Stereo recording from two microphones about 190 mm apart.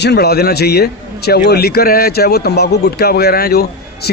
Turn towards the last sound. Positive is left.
turn(degrees=55)  # may be behind; listen again after turning